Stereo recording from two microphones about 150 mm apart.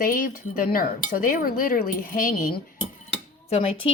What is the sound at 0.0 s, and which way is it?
Chink, 65° left (ahead or behind).